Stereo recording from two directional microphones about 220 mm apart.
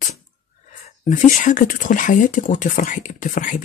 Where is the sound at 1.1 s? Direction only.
35° left (ahead or behind).